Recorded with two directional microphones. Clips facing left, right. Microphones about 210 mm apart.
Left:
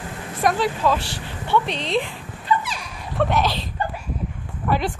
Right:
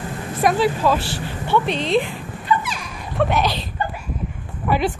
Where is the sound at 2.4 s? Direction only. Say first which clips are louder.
Right 1 dB; 35° left (ahead or behind).